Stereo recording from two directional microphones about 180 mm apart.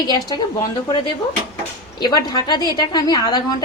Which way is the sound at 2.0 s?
25° left (ahead or behind).